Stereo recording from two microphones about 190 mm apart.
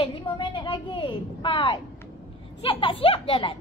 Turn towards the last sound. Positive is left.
turn(degrees=30)  # may be behind; listen again after turning